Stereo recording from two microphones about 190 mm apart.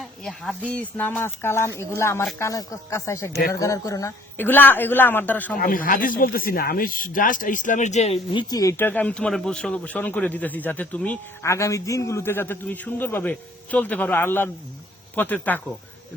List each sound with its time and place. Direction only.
0.0 s speech: centre (ahead or behind)
5.5 s speech: 45° left (ahead or behind); by 15.6 s 10° left (ahead or behind)